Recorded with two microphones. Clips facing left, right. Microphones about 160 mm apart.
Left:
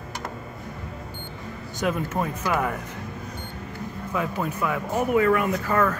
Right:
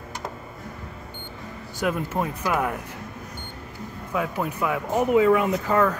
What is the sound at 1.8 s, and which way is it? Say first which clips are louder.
Speech: even; 10° right (ahead or behind).